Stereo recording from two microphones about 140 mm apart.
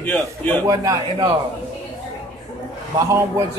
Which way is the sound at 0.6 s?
25° right (ahead or behind).